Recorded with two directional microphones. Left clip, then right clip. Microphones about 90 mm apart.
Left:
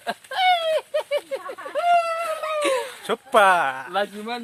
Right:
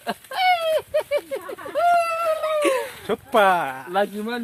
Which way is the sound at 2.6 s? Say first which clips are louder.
Left 2 dB; 5° right (ahead or behind).